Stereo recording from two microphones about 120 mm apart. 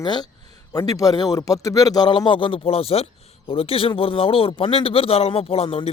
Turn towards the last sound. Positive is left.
turn(degrees=55)  # may be behind; listen again after turning